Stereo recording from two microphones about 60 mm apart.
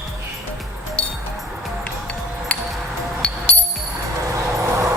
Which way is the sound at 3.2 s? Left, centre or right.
Centre.